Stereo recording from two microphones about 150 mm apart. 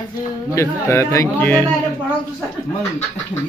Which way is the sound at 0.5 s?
20° left (ahead or behind).